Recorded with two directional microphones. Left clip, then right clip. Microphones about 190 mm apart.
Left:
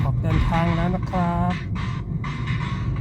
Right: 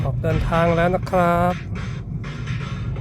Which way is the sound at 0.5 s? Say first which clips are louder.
Right 8 dB; 35° right (ahead or behind).